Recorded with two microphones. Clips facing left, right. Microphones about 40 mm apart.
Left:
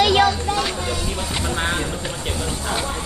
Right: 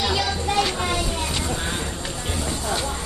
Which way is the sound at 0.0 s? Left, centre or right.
Left.